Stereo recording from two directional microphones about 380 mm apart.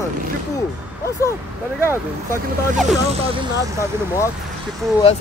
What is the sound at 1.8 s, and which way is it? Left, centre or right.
Speech, centre.